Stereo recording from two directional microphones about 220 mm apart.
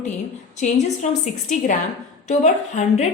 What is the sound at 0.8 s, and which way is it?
Speech, 35° left (ahead or behind).